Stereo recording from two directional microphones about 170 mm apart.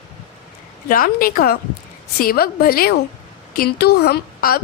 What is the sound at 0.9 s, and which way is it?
A woman's voice, 60° left (ahead or behind).